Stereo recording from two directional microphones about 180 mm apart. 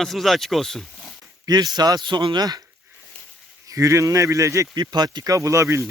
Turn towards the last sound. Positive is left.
turn(degrees=-15)  # may be behind; listen again after turning